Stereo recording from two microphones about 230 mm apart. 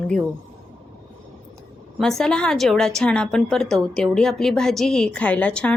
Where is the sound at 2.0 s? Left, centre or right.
Centre.